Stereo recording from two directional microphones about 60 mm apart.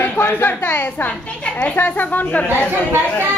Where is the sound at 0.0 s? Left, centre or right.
Left.